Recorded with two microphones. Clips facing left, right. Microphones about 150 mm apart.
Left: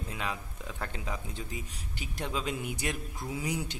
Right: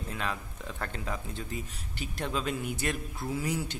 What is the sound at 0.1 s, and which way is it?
Speech, 10° left (ahead or behind).